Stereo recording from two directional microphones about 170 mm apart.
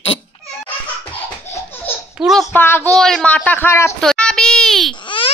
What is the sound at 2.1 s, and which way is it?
Speech, centre (ahead or behind).